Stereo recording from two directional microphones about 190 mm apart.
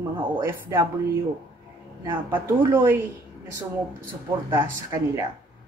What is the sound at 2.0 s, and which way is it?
A woman's voice, 10° right (ahead or behind).